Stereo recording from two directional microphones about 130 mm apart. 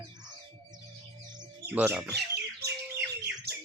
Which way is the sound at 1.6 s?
15° right (ahead or behind).